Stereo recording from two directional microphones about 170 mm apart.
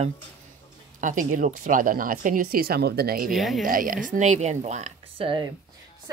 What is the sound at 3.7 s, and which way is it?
Speech, 55° right (ahead or behind).